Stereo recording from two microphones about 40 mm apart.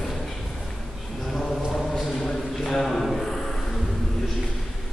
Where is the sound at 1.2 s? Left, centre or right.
Centre.